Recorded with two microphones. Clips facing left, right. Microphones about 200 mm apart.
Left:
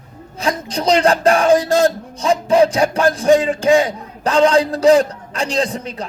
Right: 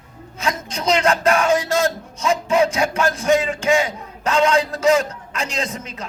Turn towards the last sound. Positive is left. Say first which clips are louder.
# left 7 dB
turn(degrees=35)  # may be behind; listen again after turning